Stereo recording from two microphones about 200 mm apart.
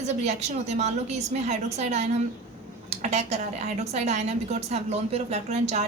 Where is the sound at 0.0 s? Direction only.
35° right (ahead or behind).